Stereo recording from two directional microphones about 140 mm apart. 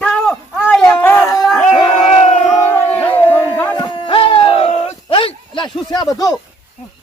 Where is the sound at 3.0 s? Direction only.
15° left (ahead or behind).